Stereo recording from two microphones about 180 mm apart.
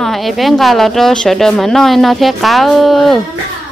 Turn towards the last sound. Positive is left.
turn(degrees=0)  # may be behind; listen again after turning